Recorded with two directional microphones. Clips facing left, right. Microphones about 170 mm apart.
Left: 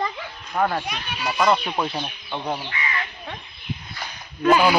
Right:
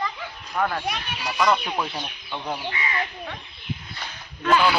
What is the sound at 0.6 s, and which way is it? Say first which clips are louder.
Speech: left 2 dB; 20° left (ahead or behind).